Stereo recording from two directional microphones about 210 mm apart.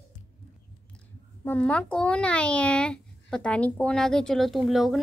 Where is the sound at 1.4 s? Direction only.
10° left (ahead or behind).